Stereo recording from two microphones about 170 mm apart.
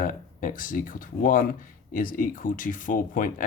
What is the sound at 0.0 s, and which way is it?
Speech, 50° left (ahead or behind).